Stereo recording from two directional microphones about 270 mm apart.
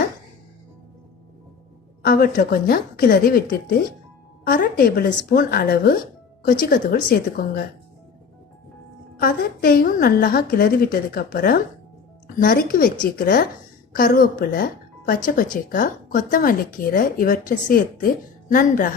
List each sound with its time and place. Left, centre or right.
2.0 s speech: left
4.4 s speech: left
9.1 s speech: left